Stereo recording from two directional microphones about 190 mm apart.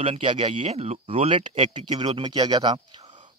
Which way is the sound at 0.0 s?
30° right (ahead or behind).